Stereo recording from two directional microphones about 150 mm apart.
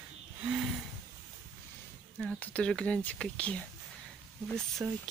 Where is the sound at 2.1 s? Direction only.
5° left (ahead or behind).